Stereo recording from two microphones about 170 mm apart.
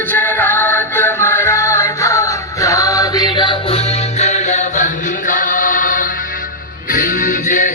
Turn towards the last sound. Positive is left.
turn(degrees=50)  # may be behind; listen again after turning